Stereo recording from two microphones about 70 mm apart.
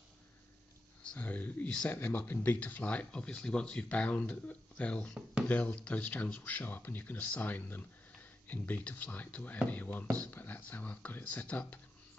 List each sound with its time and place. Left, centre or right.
1.0 s speech: left
2.0 s speech: left